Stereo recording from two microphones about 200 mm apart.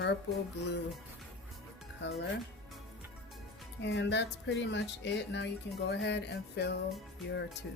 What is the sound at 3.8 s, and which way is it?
Speech, 60° left (ahead or behind).